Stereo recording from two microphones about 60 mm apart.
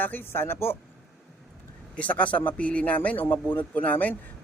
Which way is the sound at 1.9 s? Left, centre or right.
Left.